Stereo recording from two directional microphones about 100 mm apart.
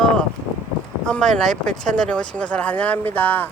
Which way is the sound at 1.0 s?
5° left (ahead or behind).